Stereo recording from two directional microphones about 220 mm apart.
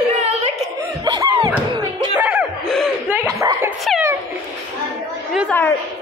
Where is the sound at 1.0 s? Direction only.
15° right (ahead or behind).